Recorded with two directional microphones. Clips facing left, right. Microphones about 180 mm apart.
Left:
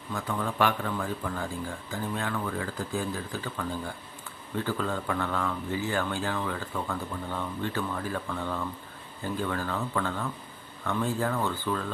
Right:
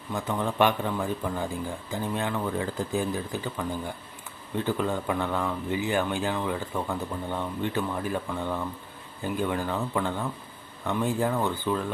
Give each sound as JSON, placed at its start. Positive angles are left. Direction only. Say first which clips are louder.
{"t": 0.1, "sound": "speech", "louder": "right 3 dB", "side_deg": -20}